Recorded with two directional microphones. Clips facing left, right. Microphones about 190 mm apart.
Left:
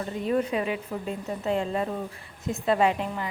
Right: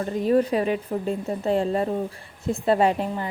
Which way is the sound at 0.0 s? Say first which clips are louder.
Right 6 dB; 40° right (ahead or behind).